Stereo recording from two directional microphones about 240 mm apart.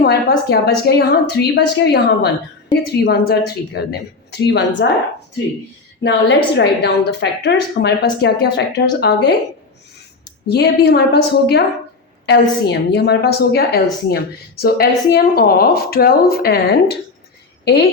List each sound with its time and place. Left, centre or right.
0.0 s a woman's voice: left
6.0 s a woman's voice: left
10.4 s a woman's voice: left